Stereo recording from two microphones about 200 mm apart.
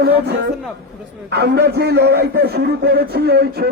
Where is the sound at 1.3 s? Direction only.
55° right (ahead or behind).